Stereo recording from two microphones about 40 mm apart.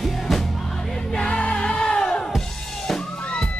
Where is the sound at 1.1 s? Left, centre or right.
Left.